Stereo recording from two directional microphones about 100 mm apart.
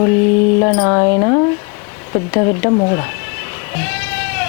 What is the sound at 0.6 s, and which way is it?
Speech, 30° left (ahead or behind).